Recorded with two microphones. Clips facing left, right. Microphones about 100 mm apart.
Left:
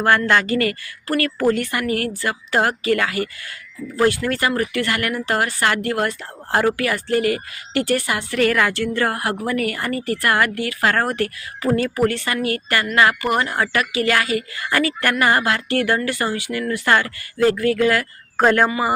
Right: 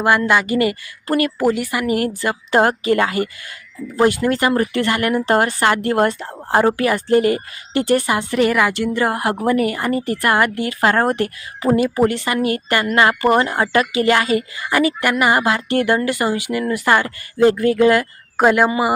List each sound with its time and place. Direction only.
0.0 s speech: 15° right (ahead or behind)
18.4 s speech: 10° right (ahead or behind)